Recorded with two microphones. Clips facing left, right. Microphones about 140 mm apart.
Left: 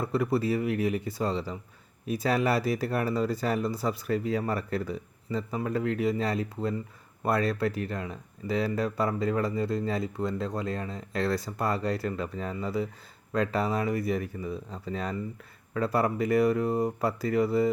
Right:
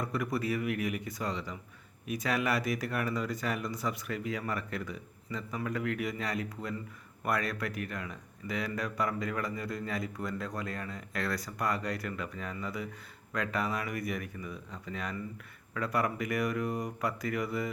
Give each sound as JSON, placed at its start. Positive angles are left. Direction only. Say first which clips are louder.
{"t": 0.0, "sound": "speech", "louder": "left 6 dB", "side_deg": 30}